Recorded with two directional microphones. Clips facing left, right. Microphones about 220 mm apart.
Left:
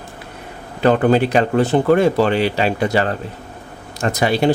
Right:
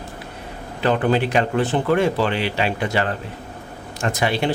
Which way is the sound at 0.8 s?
40° left (ahead or behind).